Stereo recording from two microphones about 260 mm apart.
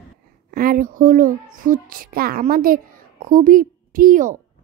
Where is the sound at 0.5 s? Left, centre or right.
Right.